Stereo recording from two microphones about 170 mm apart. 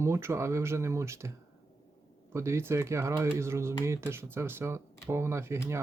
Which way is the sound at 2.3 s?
15° right (ahead or behind).